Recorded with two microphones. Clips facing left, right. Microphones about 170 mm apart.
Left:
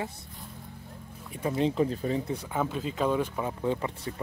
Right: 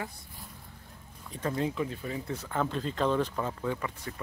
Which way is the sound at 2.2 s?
10° left (ahead or behind).